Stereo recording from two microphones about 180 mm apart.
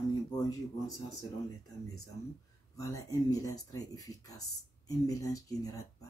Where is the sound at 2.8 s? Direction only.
20° left (ahead or behind).